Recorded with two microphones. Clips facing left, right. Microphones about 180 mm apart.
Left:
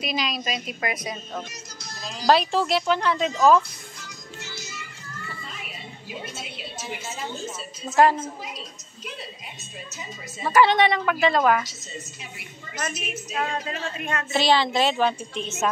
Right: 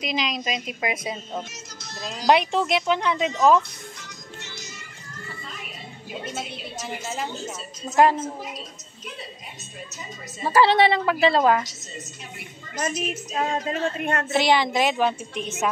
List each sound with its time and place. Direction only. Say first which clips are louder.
0.0 s a woman's voice: right 1 dB; 20° right (ahead or behind)
1.5 s music: right 1 dB; centre (ahead or behind)
2.2 s a woman's voice: even; 20° right (ahead or behind)
4.4 s music: left 3 dB; 5° left (ahead or behind)
7.9 s a woman's voice: even; 20° right (ahead or behind)
10.4 s a woman's voice: right 1 dB; 30° right (ahead or behind)
12.7 s a woman's voice: right 4 dB; 35° right (ahead or behind)
13.5 s speech: right 5 dB; 45° right (ahead or behind)
14.3 s a woman's voice: even; 20° right (ahead or behind)